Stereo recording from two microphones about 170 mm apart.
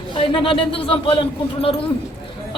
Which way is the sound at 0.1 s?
30° left (ahead or behind).